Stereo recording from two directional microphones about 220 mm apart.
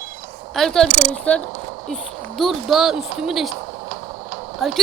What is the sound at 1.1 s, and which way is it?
Speech, 5° left (ahead or behind).